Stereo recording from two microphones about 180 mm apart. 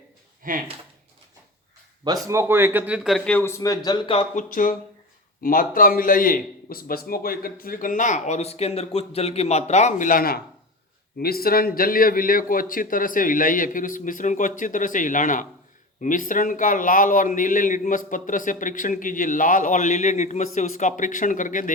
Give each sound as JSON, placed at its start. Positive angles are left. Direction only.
{"t": 0.4, "sound": "speech", "side_deg": -50}
{"t": 2.2, "sound": "a man's voice", "side_deg": -15}
{"t": 4.4, "sound": "a man's voice", "side_deg": 50}